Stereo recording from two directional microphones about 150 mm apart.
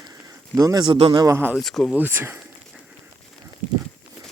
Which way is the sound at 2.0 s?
15° right (ahead or behind).